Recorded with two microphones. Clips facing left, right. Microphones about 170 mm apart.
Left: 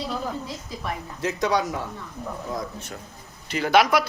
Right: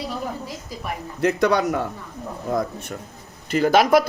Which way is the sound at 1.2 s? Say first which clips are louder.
Right 5 dB; 60° right (ahead or behind).